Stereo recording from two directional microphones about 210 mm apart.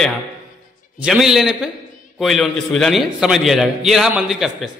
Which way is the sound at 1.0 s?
Centre (ahead or behind).